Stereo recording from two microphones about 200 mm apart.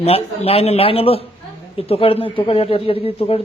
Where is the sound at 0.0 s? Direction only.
30° left (ahead or behind).